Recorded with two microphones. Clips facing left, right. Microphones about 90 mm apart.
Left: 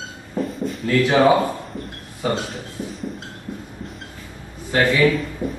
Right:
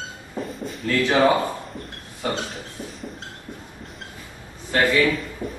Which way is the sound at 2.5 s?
Centre (ahead or behind).